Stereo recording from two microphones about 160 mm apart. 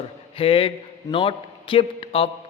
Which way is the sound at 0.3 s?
35° left (ahead or behind).